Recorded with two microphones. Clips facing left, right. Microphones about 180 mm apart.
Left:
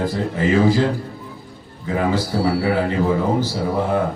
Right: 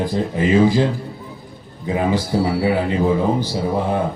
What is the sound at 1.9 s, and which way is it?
A man's voice, 20° right (ahead or behind).